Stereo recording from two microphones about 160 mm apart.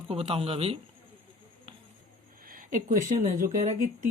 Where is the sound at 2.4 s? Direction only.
55° right (ahead or behind).